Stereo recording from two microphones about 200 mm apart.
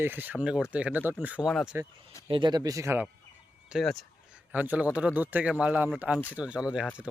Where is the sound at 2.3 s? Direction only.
25° right (ahead or behind).